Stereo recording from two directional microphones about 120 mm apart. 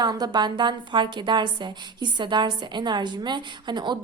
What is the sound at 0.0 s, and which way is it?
A woman's voice, 35° right (ahead or behind).